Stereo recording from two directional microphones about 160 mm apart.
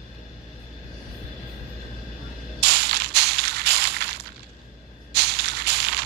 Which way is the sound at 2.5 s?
90° right.